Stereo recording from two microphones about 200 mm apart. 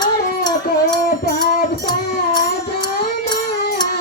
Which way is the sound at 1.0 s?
40° left (ahead or behind).